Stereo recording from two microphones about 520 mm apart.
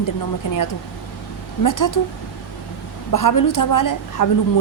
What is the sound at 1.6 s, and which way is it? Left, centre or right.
Speech, left.